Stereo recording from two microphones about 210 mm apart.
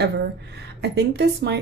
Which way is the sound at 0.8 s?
55° right (ahead or behind).